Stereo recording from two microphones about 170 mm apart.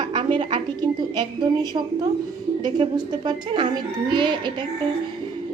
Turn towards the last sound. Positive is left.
turn(degrees=-25)  # may be behind; listen again after turning